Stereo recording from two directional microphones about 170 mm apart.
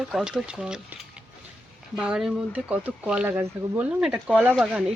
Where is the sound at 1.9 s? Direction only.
5° right (ahead or behind).